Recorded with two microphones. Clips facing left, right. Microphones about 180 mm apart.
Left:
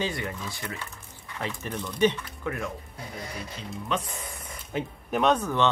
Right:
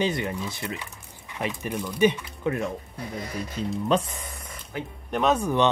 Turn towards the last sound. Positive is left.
turn(degrees=-15)  # may be behind; listen again after turning